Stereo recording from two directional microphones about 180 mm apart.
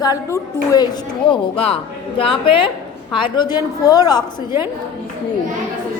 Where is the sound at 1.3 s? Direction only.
30° left (ahead or behind).